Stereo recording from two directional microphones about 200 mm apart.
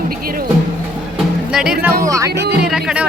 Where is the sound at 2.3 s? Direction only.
55° right (ahead or behind).